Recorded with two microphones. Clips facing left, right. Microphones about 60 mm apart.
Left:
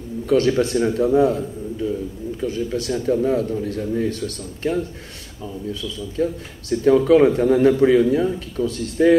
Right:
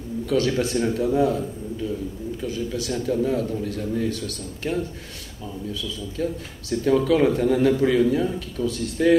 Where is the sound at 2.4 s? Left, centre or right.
Left.